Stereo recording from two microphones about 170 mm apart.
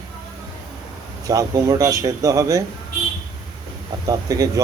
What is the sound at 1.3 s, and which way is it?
Speech, 20° right (ahead or behind).